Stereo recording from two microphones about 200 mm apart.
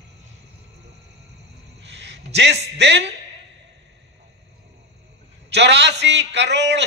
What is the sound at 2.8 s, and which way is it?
Speech, 60° right (ahead or behind).